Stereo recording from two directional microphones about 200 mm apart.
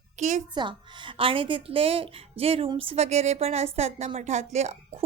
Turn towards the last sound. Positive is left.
turn(degrees=-35)  # may be behind; listen again after turning